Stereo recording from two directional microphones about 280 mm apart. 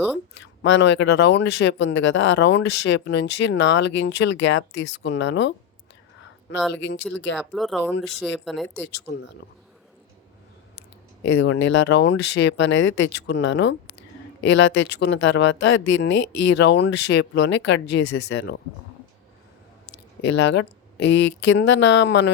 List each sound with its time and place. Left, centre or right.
0.3 s speech: left
6.6 s speech: centre
6.8 s speech: left
7.5 s speech: centre
11.3 s speech: left
20.2 s speech: left